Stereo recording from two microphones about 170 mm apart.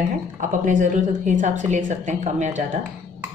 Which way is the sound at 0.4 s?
50° right (ahead or behind).